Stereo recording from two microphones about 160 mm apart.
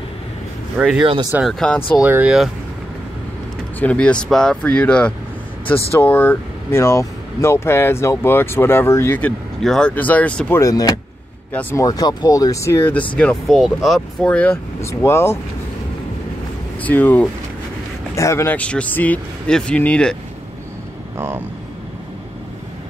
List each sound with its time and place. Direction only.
0.7 s speech: 5° right (ahead or behind)
1.5 s speech: 5° left (ahead or behind)
2.0 s speech: 10° right (ahead or behind)
3.8 s speech: 5° left (ahead or behind)
9.6 s speech: 5° left (ahead or behind)
10.6 s speech: 25° left (ahead or behind)
16.8 s speech: 10° left (ahead or behind)